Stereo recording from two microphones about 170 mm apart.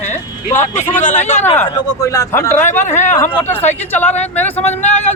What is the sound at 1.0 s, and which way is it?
Speech, 45° left (ahead or behind).